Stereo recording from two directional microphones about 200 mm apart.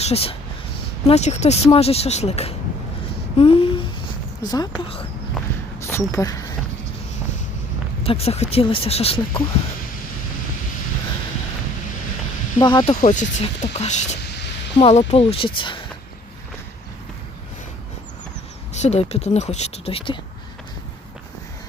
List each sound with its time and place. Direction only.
0.0 s speech: 30° left (ahead or behind)
8.0 s speech: 30° left (ahead or behind)
12.5 s speech: 20° left (ahead or behind)
12.9 s speech: 40° left (ahead or behind)
18.7 s speech: 35° left (ahead or behind)